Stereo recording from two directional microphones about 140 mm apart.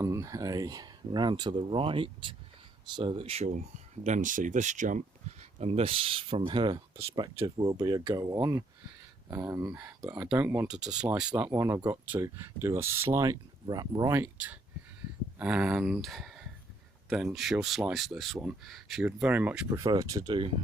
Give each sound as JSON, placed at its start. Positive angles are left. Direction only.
{"t": 0.0, "sound": "speech", "side_deg": -20}
{"t": 4.0, "sound": "speech", "side_deg": -65}
{"t": 6.9, "sound": "speech", "side_deg": -20}
{"t": 10.2, "sound": "speech", "side_deg": -10}
{"t": 14.3, "sound": "speech", "side_deg": -10}
{"t": 19.0, "sound": "speech", "side_deg": -15}
{"t": 19.7, "sound": "speech", "side_deg": -25}